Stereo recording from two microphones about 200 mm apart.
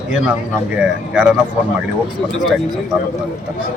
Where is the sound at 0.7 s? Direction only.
5° right (ahead or behind).